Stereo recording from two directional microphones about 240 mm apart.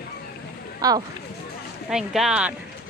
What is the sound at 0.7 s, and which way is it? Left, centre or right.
Speech, centre.